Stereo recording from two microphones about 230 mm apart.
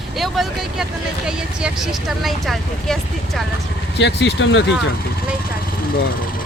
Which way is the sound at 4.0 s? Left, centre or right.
Left.